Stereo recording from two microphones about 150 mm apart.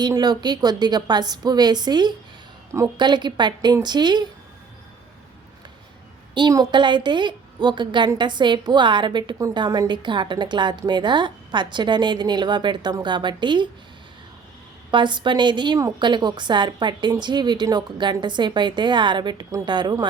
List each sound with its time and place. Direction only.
0.0 s a woman's voice: 25° right (ahead or behind)
6.3 s a woman's voice: 30° right (ahead or behind)
14.8 s a woman's voice: 30° right (ahead or behind)